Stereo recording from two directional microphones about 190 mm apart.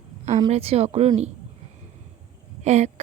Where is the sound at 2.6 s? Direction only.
35° right (ahead or behind).